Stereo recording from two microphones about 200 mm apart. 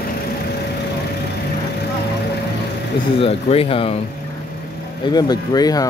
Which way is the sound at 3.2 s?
30° left (ahead or behind).